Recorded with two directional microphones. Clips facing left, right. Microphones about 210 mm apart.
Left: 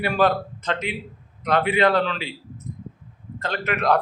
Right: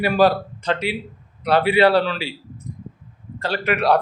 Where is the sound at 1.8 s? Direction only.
35° right (ahead or behind).